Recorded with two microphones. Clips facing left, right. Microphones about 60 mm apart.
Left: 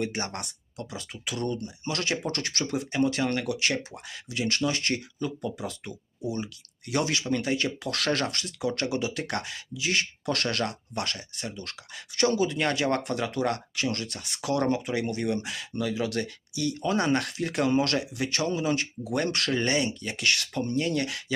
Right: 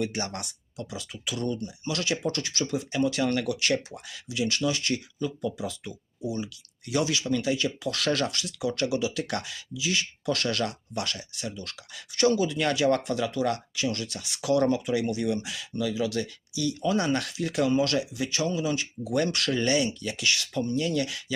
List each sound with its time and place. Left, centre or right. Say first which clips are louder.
0.0 s speech: even; left